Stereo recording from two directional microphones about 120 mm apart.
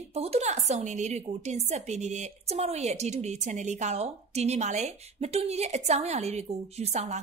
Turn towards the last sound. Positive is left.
turn(degrees=-75)  # may be behind; listen again after turning